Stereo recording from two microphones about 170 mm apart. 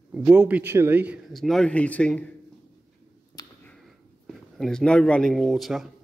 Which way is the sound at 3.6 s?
Centre (ahead or behind).